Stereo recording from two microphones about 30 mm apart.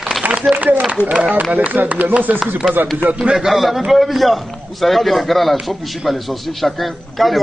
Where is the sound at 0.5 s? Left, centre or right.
Right.